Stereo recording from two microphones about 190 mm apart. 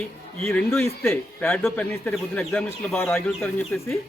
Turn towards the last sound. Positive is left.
turn(degrees=10)  # may be behind; listen again after turning